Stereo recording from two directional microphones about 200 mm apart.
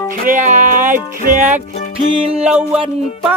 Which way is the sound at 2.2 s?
30° right (ahead or behind).